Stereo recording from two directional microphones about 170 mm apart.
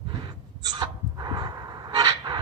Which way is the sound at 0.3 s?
25° right (ahead or behind).